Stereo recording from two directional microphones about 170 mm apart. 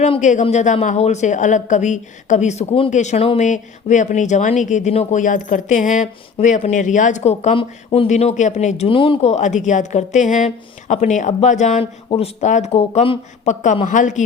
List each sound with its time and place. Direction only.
0.0 s speech: 45° left (ahead or behind)